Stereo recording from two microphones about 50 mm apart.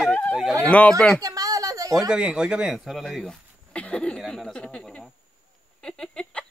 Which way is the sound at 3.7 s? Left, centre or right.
Left.